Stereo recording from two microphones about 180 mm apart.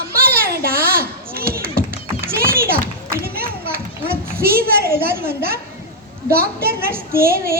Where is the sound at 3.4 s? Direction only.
55° right (ahead or behind).